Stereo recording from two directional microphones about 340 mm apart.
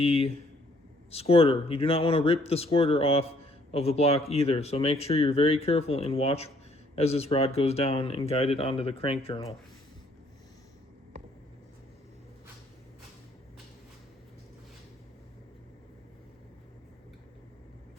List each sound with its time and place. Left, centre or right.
0.0 s a man's voice: centre